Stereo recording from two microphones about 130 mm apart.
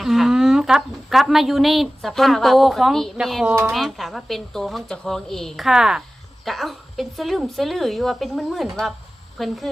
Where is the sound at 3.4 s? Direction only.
20° right (ahead or behind).